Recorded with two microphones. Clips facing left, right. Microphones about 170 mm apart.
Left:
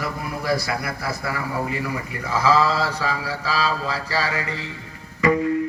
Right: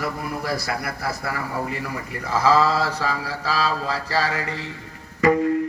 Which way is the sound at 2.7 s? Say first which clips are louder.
Even; 55° right (ahead or behind).